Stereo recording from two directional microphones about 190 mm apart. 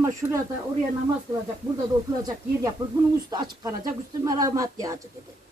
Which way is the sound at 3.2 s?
20° right (ahead or behind).